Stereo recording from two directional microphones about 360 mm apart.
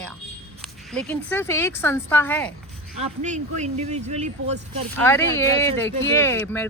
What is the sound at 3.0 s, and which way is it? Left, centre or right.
Speech, centre.